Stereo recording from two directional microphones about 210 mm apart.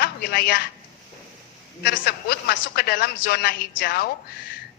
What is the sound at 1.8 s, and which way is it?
A woman's voice, 50° left (ahead or behind).